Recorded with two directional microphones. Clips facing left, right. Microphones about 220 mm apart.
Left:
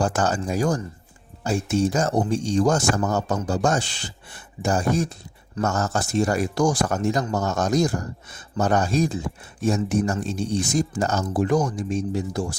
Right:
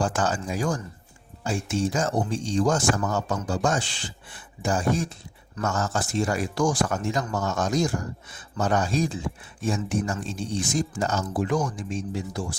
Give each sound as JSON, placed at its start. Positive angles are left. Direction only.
{"t": 0.0, "sound": "speech", "side_deg": 40}